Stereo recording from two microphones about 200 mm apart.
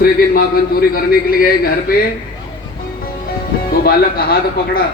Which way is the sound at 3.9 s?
50° left (ahead or behind).